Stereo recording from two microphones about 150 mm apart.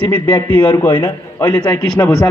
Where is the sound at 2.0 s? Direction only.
20° left (ahead or behind).